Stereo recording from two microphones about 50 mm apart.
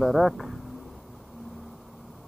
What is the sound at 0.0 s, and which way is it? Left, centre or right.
Speech, centre.